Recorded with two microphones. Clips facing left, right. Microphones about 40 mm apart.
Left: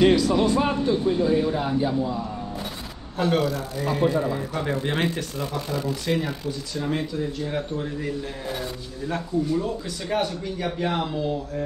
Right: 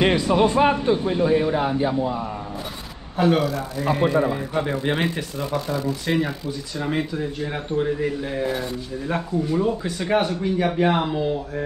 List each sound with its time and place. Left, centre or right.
0.0 s speech: right
3.2 s speech: centre
3.4 s speech: centre
3.8 s speech: right
4.9 s speech: centre